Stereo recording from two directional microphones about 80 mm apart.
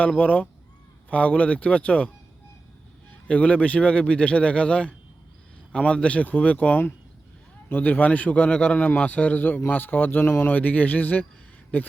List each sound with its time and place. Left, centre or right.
0.2 s a man's voice: centre
3.2 s a man's voice: centre